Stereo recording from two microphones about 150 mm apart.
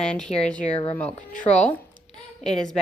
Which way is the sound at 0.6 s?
40° left (ahead or behind).